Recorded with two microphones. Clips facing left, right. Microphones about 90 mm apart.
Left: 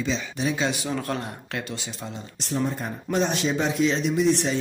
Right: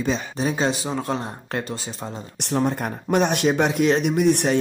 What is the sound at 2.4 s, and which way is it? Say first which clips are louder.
Speech: right 4 dB; 65° right (ahead or behind).